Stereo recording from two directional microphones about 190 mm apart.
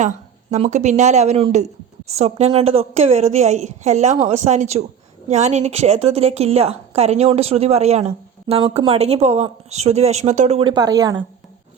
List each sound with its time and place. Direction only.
0.5 s a woman's voice: 40° right (ahead or behind); by 11.2 s 20° right (ahead or behind)